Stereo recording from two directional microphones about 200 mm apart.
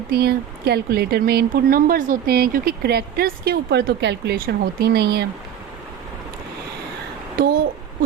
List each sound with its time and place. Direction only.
0.1 s speech: 55° right (ahead or behind)